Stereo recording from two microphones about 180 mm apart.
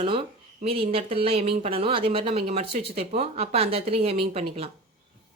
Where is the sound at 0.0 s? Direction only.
30° right (ahead or behind).